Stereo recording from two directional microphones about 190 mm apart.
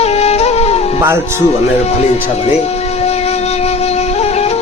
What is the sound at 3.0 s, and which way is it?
Music, 35° left (ahead or behind).